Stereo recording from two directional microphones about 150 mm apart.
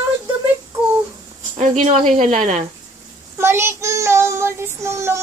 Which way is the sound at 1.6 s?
55° right (ahead or behind).